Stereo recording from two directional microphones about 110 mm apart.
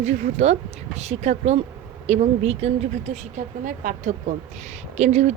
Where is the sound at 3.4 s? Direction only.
90° right.